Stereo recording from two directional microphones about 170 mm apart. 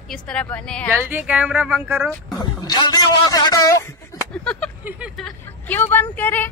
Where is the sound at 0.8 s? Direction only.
10° right (ahead or behind).